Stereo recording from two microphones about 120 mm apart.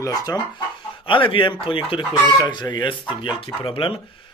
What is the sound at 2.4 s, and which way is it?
A man's voice, 35° left (ahead or behind).